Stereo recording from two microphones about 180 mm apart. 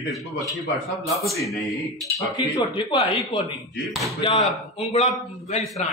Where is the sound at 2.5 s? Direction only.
25° left (ahead or behind).